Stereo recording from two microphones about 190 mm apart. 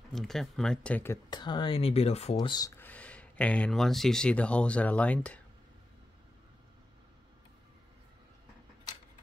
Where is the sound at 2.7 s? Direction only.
10° left (ahead or behind).